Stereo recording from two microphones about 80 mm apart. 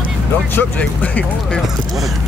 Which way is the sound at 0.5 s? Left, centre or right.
Centre.